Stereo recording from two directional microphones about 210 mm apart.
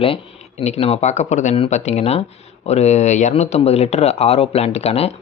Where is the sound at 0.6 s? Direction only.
30° left (ahead or behind).